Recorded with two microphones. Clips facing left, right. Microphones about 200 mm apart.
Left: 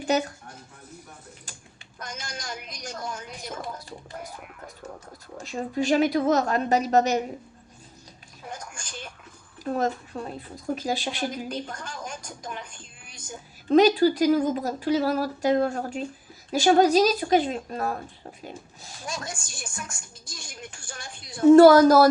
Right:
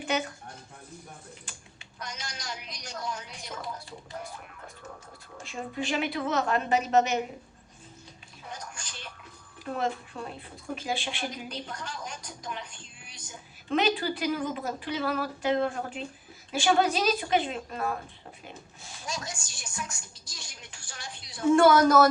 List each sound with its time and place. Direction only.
2.0 s a woman's voice: 50° left (ahead or behind)
5.4 s speech: 40° left (ahead or behind)
8.4 s a sound: 50° left (ahead or behind)
9.6 s a woman's voice: 40° left (ahead or behind)